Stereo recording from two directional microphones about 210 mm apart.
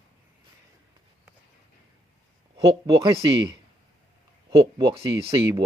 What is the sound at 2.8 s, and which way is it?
Speech, 20° right (ahead or behind).